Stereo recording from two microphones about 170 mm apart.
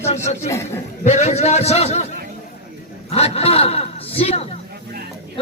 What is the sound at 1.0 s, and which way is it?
Speech, 40° left (ahead or behind).